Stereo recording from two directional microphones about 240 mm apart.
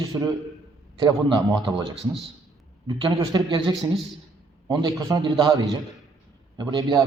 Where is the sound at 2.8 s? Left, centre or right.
Centre.